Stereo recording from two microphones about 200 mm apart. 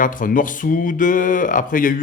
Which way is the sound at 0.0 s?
45° left (ahead or behind).